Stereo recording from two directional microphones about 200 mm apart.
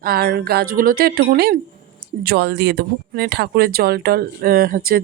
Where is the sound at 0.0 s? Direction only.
50° right (ahead or behind).